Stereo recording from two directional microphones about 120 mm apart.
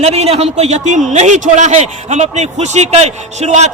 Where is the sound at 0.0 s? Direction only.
60° right (ahead or behind).